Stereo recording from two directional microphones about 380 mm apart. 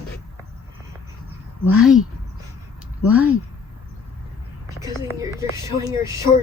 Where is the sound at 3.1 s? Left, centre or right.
Centre.